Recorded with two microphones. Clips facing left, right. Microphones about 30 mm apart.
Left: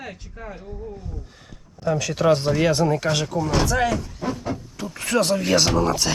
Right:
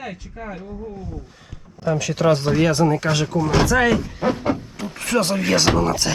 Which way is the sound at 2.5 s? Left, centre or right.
Centre.